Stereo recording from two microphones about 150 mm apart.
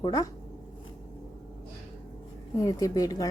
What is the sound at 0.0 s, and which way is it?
Speech, 25° left (ahead or behind).